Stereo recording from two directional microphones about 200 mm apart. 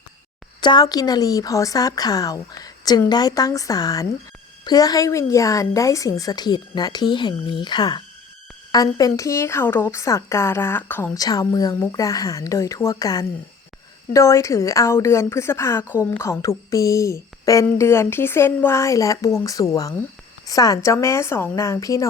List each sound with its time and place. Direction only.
0.6 s a woman's voice: 20° left (ahead or behind)